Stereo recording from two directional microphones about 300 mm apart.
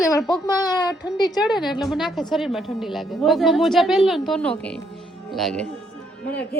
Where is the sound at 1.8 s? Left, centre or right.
Centre.